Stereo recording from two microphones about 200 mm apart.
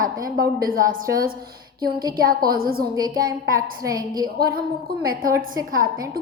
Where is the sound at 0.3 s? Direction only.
45° right (ahead or behind).